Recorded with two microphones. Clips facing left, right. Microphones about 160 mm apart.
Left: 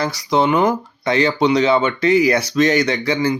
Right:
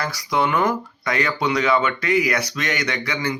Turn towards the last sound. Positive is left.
turn(degrees=30)  # may be behind; listen again after turning